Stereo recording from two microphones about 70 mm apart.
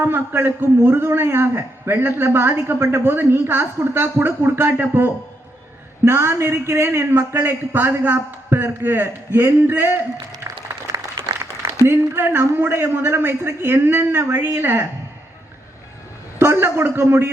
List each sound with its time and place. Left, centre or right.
0.0 s a man's voice: right
10.4 s applause: right
11.9 s a man's voice: right
16.4 s a man's voice: right